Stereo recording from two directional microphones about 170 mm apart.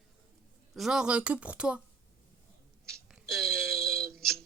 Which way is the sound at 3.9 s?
15° right (ahead or behind).